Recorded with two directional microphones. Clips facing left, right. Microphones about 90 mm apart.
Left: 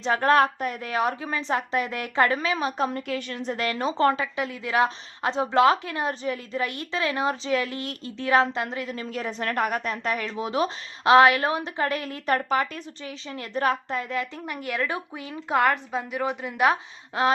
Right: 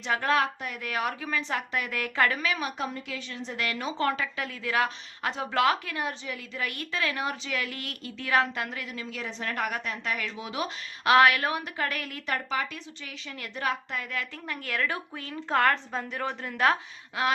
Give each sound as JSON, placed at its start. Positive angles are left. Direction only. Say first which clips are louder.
{"t": 0.0, "sound": "a woman's voice", "louder": "left 6 dB", "side_deg": 35}
{"t": 2.9, "sound": "a woman's voice", "louder": "left 7 dB", "side_deg": 55}
{"t": 9.0, "sound": "a woman's voice", "louder": "left 6 dB", "side_deg": 45}
{"t": 13.1, "sound": "a woman's voice", "louder": "left 6 dB", "side_deg": 30}
{"t": 13.6, "sound": "a woman's voice", "louder": "left 6 dB", "side_deg": 40}
{"t": 14.0, "sound": "a woman's voice", "louder": "left 6 dB", "side_deg": 20}